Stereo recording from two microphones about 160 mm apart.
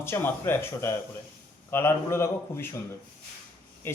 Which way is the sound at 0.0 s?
15° left (ahead or behind).